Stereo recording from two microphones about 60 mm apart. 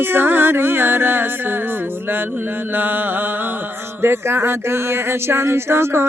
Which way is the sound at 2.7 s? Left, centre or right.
Right.